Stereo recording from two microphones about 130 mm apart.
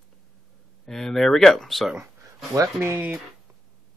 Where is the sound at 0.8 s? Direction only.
5° left (ahead or behind).